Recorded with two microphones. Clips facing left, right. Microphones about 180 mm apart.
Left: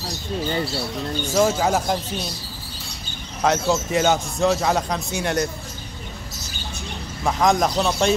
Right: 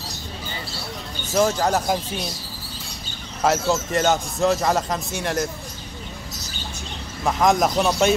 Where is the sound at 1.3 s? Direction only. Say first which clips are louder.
Even; centre (ahead or behind).